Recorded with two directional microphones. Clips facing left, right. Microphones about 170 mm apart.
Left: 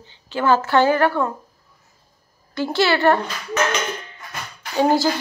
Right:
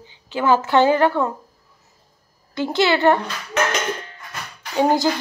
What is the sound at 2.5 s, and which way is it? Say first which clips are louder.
Speech: right 1 dB; 20° right (ahead or behind).